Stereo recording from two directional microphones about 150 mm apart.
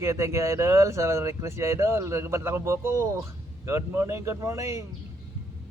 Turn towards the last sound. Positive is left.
turn(degrees=-20)  # may be behind; listen again after turning